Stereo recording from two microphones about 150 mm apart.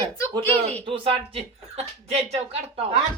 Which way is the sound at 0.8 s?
35° right (ahead or behind).